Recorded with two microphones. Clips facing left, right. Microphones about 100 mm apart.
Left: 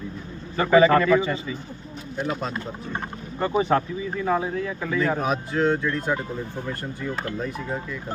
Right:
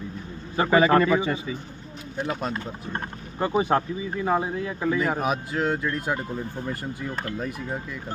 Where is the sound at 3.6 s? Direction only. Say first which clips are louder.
Left 1 dB; 10° right (ahead or behind).